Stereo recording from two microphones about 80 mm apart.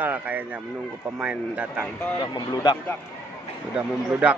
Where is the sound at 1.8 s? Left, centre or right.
Centre.